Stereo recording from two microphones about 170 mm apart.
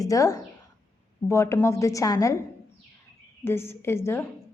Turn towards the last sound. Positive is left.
turn(degrees=15)  # may be behind; listen again after turning